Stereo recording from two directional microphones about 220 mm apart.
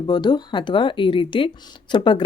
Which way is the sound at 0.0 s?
20° left (ahead or behind).